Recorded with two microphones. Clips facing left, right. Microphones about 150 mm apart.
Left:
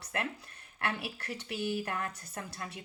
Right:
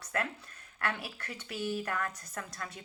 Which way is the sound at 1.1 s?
35° left (ahead or behind).